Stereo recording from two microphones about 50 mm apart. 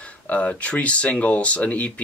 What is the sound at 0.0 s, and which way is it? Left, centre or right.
Speech, left.